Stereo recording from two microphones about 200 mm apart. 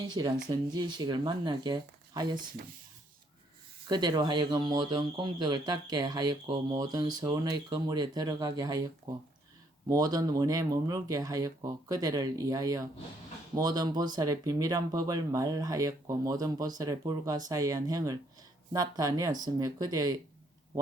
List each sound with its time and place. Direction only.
0.1 s speech: 20° right (ahead or behind)
3.8 s speech: 20° right (ahead or behind)
9.9 s speech: 20° right (ahead or behind)